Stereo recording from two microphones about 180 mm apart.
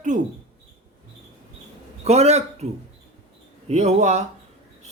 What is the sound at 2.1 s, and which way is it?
Speech, 35° right (ahead or behind).